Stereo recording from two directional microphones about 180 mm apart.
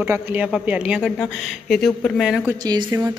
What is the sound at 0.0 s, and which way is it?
Speech, 10° right (ahead or behind).